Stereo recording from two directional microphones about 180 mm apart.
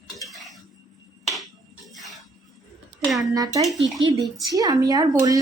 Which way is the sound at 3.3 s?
20° right (ahead or behind).